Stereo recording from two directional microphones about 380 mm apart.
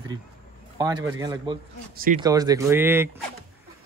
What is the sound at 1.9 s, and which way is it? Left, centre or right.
Speech, right.